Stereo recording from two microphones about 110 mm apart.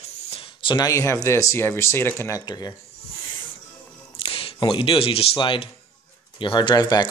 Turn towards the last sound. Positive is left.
turn(degrees=35)  # may be behind; listen again after turning